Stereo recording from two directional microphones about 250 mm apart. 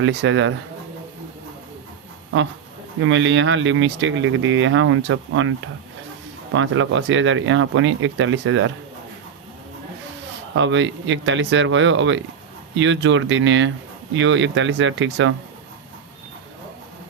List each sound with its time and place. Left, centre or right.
0.0 s speech: right
3.0 s speech: right
10.5 s speech: right